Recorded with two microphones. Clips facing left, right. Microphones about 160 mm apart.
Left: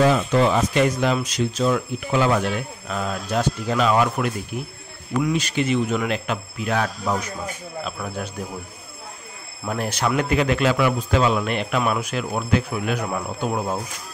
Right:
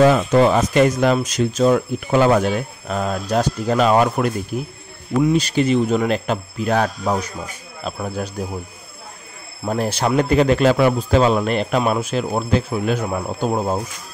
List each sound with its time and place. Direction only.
0.0 s a man's voice: 50° right (ahead or behind)
9.7 s a man's voice: 30° right (ahead or behind)